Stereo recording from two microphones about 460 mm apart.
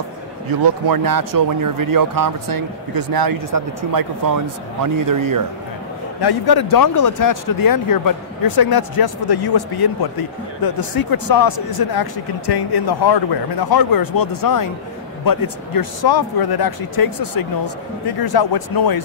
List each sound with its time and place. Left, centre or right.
0.6 s speech: right
6.2 s speech: left